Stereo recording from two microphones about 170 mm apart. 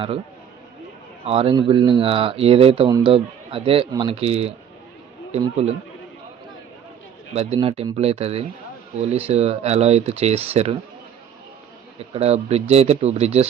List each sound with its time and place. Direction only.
1.2 s speech: 35° right (ahead or behind)
7.3 s speech: 35° right (ahead or behind)
12.1 s speech: 35° right (ahead or behind)